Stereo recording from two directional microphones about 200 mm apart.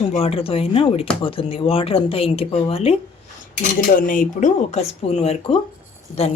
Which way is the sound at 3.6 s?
40° left (ahead or behind).